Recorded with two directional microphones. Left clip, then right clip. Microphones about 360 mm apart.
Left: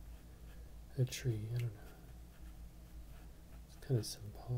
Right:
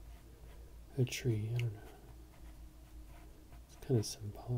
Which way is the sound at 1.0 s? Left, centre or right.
Right.